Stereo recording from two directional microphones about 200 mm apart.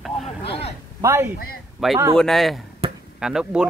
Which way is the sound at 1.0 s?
10° right (ahead or behind).